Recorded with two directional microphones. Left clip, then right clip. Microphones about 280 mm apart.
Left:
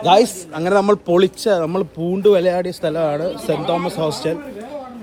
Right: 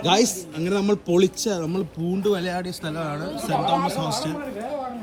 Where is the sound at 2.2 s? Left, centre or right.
Centre.